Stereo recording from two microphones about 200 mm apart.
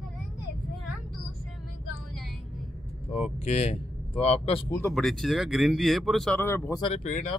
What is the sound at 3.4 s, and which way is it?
Speech, 30° left (ahead or behind).